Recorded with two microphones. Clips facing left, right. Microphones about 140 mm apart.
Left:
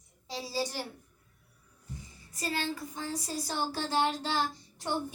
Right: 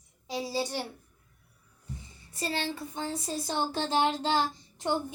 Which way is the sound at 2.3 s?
25° right (ahead or behind).